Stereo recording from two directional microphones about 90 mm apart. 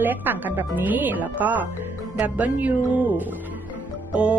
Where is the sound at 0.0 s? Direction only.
20° right (ahead or behind).